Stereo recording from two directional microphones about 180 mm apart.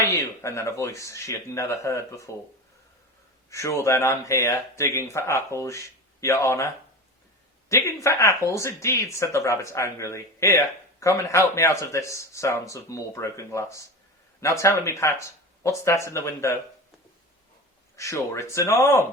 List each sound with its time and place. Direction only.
0.0 s speech: 15° left (ahead or behind)
3.5 s speech: 15° left (ahead or behind)
7.7 s speech: 15° left (ahead or behind)
17.9 s speech: 15° left (ahead or behind)